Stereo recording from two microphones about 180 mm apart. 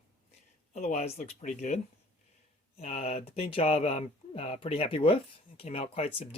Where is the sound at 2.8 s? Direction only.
35° left (ahead or behind).